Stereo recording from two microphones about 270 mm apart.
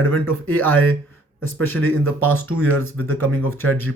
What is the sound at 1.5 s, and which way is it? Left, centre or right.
Speech, right.